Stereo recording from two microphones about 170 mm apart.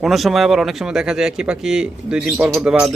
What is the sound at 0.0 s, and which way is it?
A man's voice, centre (ahead or behind).